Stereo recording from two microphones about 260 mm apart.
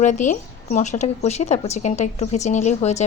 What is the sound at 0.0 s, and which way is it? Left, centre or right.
A woman's voice, left.